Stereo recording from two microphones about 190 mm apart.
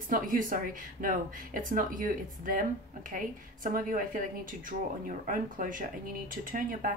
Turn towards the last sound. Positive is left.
turn(degrees=-50)  # may be behind; listen again after turning